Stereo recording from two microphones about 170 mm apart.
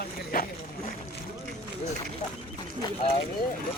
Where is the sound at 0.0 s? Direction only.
60° left (ahead or behind).